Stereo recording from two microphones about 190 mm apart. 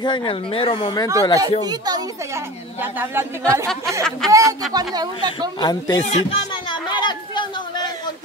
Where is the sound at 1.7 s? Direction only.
20° right (ahead or behind).